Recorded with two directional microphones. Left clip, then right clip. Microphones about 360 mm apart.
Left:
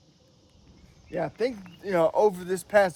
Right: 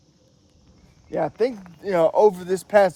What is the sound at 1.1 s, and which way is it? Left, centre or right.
Speech, centre.